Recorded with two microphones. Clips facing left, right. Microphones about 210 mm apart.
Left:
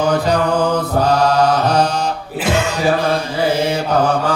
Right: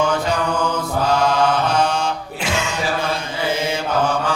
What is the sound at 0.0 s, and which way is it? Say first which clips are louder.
Mantra: left 4 dB; 35° left (ahead or behind).